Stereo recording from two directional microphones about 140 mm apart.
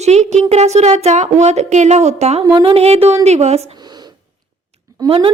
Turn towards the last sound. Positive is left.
turn(degrees=-40)  # may be behind; listen again after turning